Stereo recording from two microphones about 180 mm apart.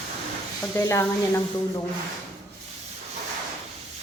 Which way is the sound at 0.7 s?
15° left (ahead or behind).